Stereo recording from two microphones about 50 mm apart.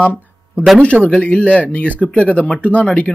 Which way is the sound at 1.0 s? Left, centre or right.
Right.